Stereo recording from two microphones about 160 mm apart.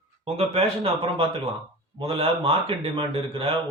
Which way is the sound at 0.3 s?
35° right (ahead or behind).